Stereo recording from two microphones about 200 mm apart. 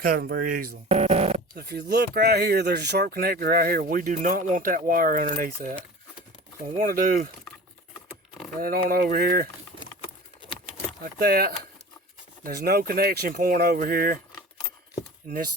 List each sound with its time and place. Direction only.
0.0 s speech: 45° right (ahead or behind)
1.5 s speech: 55° right (ahead or behind)
6.7 s speech: 45° right (ahead or behind)
8.6 s speech: 45° right (ahead or behind)
11.0 s speech: 50° right (ahead or behind)